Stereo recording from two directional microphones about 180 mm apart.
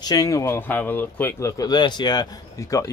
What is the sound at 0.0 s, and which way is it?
Speech, 20° left (ahead or behind).